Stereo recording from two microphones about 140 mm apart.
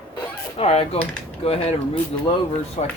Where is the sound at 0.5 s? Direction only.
45° left (ahead or behind).